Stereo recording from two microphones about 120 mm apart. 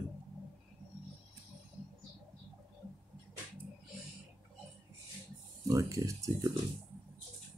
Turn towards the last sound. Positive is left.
turn(degrees=-30)  # may be behind; listen again after turning